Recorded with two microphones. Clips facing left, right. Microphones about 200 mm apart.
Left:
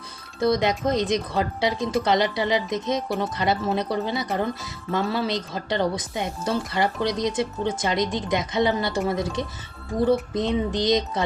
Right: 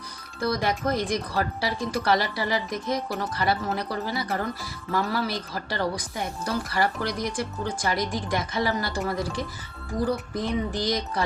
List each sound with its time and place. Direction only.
0.3 s a woman's voice: 20° left (ahead or behind)